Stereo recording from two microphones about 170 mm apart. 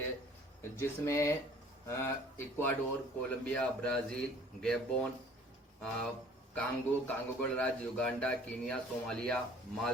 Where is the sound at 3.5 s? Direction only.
5° left (ahead or behind).